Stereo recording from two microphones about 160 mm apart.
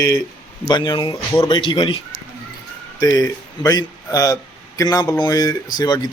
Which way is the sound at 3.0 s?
25° left (ahead or behind).